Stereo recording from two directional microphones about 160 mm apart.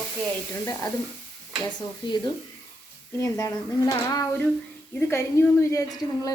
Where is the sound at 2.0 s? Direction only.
30° left (ahead or behind).